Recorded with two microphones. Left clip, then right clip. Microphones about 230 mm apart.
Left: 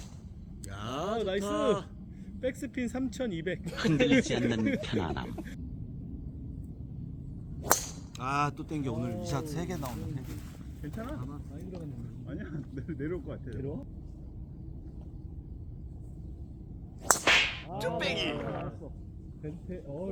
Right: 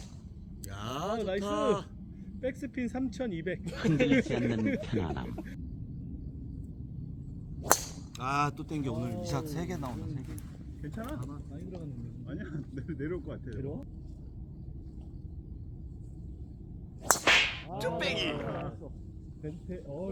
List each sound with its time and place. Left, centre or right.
0.7 s a sound: centre
1.4 s speech: centre
2.2 s speech: left
3.6 s speech: centre
8.2 s speech: centre
10.8 s speech: right
12.3 s speech: right
13.5 s speech: centre
17.0 s whip: centre
19.4 s speech: right